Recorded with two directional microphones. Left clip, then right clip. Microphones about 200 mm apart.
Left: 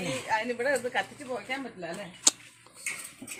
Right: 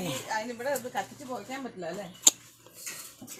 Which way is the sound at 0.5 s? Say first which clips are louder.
Left 4 dB; 45° left (ahead or behind).